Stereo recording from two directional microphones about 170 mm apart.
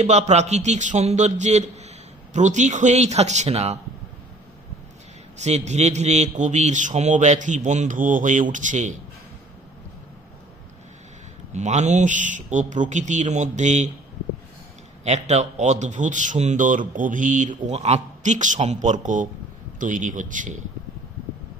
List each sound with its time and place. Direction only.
0.0 s speech: 40° right (ahead or behind)
5.4 s speech: 40° right (ahead or behind)
11.5 s speech: 45° right (ahead or behind)
15.0 s speech: 40° right (ahead or behind)